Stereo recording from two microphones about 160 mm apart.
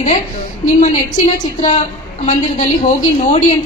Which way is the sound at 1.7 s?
50° left (ahead or behind).